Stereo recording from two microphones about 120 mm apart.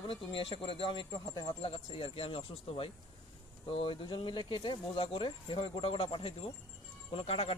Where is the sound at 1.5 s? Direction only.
50° left (ahead or behind).